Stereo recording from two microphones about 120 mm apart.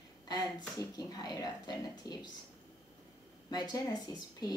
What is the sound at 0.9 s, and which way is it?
A woman's voice, 35° left (ahead or behind).